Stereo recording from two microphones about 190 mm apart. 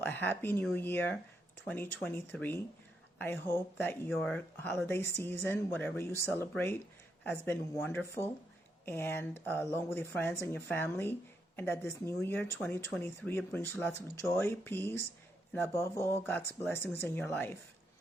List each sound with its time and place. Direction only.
0.0 s speech: 10° left (ahead or behind)